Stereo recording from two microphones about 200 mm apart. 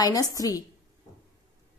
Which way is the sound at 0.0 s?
15° left (ahead or behind).